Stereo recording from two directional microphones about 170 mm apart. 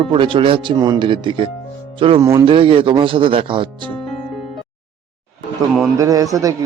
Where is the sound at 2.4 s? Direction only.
30° right (ahead or behind).